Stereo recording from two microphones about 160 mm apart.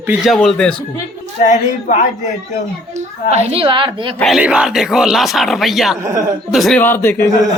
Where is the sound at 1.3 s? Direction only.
50° left (ahead or behind).